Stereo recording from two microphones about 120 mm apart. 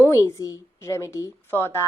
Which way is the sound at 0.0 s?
25° left (ahead or behind).